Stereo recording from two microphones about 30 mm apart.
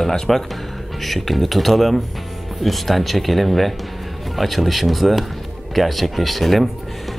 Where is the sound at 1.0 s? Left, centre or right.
Centre.